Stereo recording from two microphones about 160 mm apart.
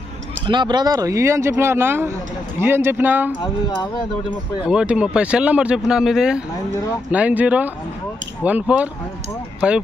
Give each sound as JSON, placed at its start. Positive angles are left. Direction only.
{"t": 0.5, "sound": "speech", "side_deg": -30}
{"t": 3.3, "sound": "speech", "side_deg": 25}
{"t": 4.6, "sound": "speech", "side_deg": -5}